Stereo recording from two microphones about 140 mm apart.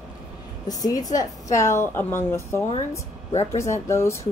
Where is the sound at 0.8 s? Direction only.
25° left (ahead or behind).